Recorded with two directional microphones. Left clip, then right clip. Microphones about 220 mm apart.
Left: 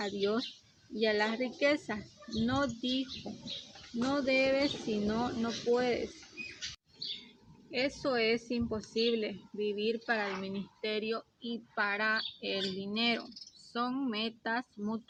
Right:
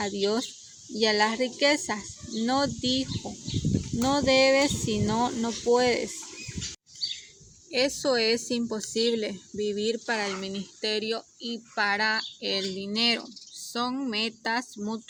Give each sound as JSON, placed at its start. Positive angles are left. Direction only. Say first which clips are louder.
{"t": 0.0, "sound": "a woman's voice", "louder": "right 6 dB", "side_deg": -35}
{"t": 7.7, "sound": "a woman's voice", "louder": "right 7 dB", "side_deg": -35}